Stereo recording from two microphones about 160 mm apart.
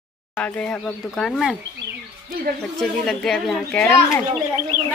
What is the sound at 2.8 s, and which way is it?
Speech, centre (ahead or behind).